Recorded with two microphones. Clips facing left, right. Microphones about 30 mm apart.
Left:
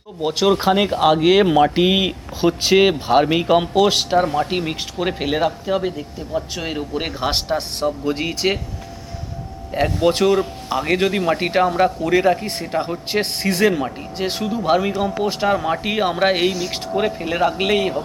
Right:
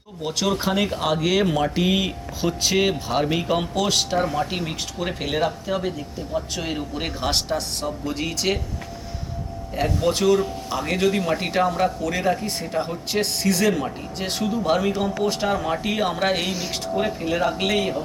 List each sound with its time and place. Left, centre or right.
0.2 s speech: left
9.7 s a man's voice: left
16.5 s speech: centre
16.9 s speech: centre